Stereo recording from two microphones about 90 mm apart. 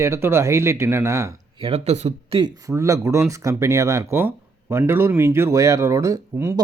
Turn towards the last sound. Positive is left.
turn(degrees=-35)  # may be behind; listen again after turning